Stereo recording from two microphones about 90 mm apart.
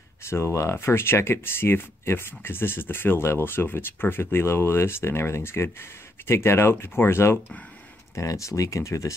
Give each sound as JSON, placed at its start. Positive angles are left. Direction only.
{"t": 0.2, "sound": "speech", "side_deg": 30}